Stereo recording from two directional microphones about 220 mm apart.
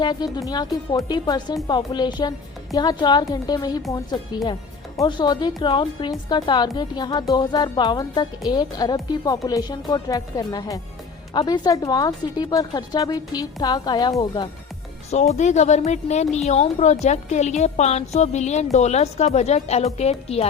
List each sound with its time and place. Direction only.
0.0 s a woman's voice: 20° left (ahead or behind)
15.1 s a woman's voice: 30° left (ahead or behind)